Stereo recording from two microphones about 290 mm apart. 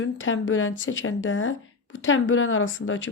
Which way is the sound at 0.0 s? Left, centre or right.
Left.